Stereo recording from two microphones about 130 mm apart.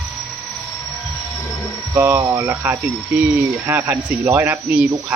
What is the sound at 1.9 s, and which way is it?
Speech, 25° right (ahead or behind).